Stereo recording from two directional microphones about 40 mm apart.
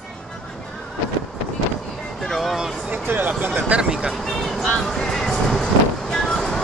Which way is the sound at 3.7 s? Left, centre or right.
Right.